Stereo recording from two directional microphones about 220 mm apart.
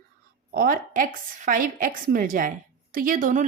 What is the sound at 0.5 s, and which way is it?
A woman's voice, 40° right (ahead or behind).